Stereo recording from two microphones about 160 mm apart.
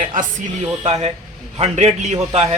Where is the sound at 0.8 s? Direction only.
35° right (ahead or behind).